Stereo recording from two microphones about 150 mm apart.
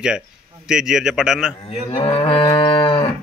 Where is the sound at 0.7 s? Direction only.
5° right (ahead or behind).